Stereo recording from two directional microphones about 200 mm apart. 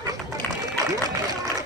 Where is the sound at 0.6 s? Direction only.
20° right (ahead or behind).